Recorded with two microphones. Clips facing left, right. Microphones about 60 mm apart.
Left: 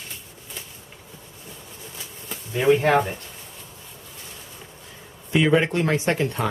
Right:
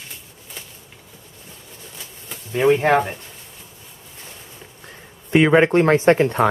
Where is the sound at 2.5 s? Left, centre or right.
Right.